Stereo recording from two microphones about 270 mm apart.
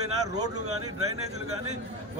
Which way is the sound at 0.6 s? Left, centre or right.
Right.